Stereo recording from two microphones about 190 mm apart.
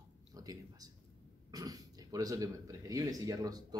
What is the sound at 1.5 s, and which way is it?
Speech, 20° right (ahead or behind).